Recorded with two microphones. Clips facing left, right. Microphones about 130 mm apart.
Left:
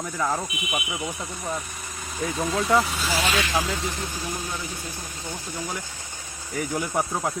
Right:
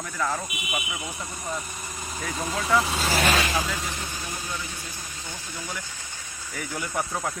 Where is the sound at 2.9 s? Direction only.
35° right (ahead or behind).